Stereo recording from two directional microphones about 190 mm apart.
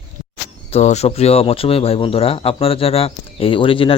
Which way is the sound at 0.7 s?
35° left (ahead or behind).